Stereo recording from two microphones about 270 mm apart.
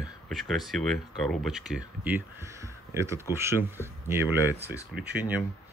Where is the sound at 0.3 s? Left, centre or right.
Centre.